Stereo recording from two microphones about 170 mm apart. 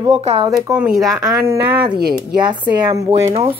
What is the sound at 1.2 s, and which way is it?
A woman's voice, 15° right (ahead or behind).